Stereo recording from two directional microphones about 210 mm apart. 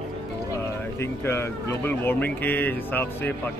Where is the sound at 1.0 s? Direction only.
10° left (ahead or behind).